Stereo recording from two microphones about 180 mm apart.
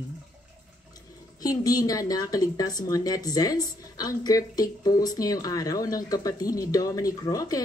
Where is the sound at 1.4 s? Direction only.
20° left (ahead or behind).